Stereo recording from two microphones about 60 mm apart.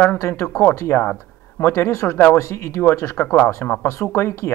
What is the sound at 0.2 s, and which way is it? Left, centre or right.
A man's voice, left.